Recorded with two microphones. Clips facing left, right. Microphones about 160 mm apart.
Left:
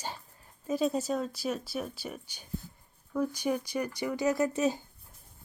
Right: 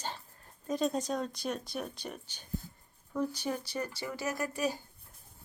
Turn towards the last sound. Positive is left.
turn(degrees=20)  # may be behind; listen again after turning